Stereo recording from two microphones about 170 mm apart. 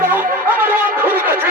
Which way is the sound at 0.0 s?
10° right (ahead or behind).